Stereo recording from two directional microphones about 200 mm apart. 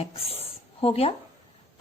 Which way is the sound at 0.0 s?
30° left (ahead or behind).